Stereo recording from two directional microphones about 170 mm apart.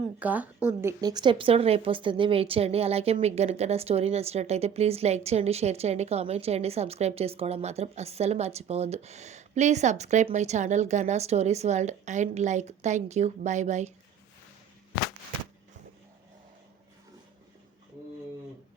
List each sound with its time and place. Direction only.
0.2 s a woman's voice: 10° right (ahead or behind); by 13.9 s 45° right (ahead or behind)